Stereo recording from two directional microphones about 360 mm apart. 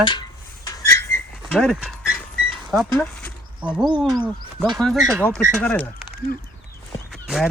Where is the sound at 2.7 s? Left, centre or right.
Centre.